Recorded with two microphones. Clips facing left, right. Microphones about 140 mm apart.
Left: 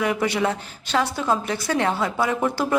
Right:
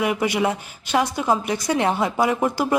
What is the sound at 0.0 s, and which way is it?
Speech, 10° right (ahead or behind).